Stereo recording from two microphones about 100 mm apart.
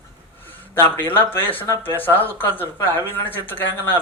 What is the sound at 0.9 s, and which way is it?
Speech, 20° left (ahead or behind).